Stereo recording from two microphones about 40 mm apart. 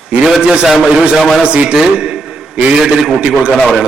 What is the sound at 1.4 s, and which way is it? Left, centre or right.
A man's voice, right.